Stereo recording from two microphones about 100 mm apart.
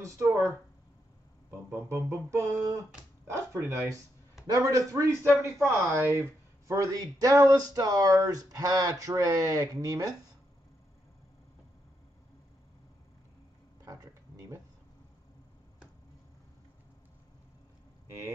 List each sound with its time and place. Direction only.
0.0 s speech: 30° right (ahead or behind)
1.5 s speech: 30° right (ahead or behind)
13.8 s a sound: 35° right (ahead or behind)